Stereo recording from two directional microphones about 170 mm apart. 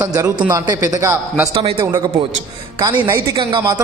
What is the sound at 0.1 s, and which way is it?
A man's voice, 20° right (ahead or behind).